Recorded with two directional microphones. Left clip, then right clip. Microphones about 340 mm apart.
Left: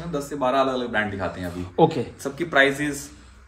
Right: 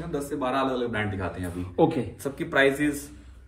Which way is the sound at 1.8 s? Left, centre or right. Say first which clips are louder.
Left 4 dB; left.